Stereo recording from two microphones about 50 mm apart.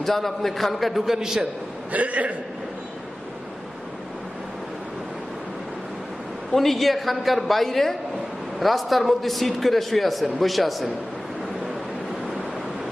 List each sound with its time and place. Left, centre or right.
0.0 s a man's voice: centre
1.9 s a man's voice: right
6.5 s a man's voice: centre